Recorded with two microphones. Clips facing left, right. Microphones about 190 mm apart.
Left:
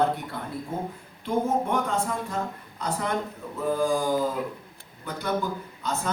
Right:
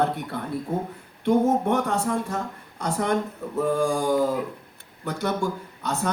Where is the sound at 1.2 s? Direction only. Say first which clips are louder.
Right 5 dB; 70° right (ahead or behind).